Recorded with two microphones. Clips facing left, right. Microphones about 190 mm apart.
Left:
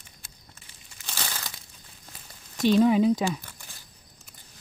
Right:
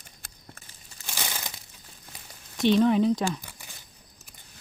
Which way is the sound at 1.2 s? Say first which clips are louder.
Right 1 dB; 15° right (ahead or behind).